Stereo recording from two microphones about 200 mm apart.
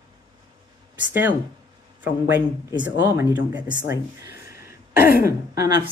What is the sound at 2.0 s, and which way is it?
Speech, 10° right (ahead or behind).